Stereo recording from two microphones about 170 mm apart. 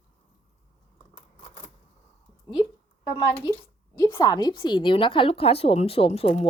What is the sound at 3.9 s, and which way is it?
A woman's voice, 20° left (ahead or behind).